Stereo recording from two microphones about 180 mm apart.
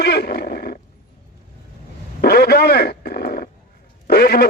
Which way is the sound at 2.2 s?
65° left (ahead or behind).